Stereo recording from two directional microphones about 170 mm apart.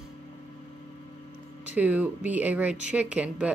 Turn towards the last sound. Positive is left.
turn(degrees=-10)  # may be behind; listen again after turning